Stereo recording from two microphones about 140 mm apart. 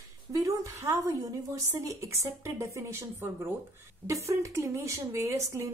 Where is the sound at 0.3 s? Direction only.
25° right (ahead or behind).